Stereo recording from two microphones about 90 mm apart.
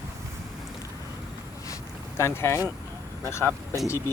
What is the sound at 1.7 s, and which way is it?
Boat, 30° left (ahead or behind).